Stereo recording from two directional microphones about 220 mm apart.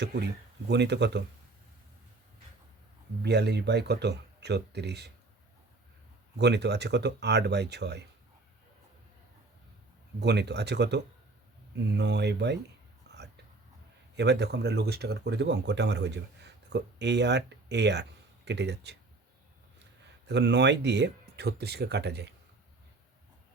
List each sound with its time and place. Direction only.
0.0 s speech: 45° right (ahead or behind)
3.2 s speech: 50° right (ahead or behind)
6.4 s speech: 50° right (ahead or behind)
10.2 s speech: 50° right (ahead or behind)
13.1 s whispering: 50° right (ahead or behind)
14.2 s speech: 50° right (ahead or behind)
20.2 s speech: 50° right (ahead or behind)